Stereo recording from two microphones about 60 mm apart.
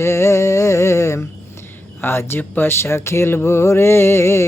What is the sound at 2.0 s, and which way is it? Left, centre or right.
Speech, left.